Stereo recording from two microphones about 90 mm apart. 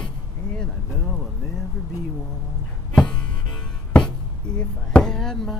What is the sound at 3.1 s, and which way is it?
Music, 10° left (ahead or behind).